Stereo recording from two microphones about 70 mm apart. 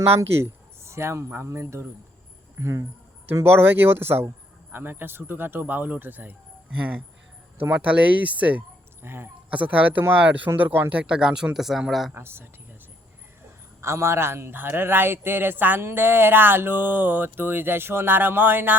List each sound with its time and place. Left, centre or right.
0.2 s speech: right
3.4 s a man's voice: right
9.0 s speech: right
9.5 s speech: centre
11.0 s speech: centre
12.1 s a man's voice: right
13.8 s a man's voice: right